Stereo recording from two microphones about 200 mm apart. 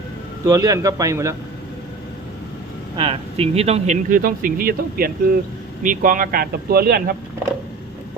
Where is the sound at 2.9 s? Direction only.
25° right (ahead or behind).